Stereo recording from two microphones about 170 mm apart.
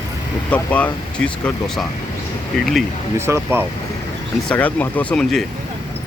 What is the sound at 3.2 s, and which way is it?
Speech, 15° right (ahead or behind).